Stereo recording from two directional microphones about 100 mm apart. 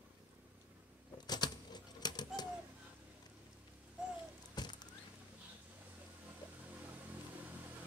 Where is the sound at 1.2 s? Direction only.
45° left (ahead or behind).